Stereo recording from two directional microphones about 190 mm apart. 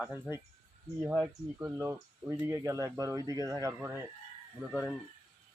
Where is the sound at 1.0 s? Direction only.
10° right (ahead or behind).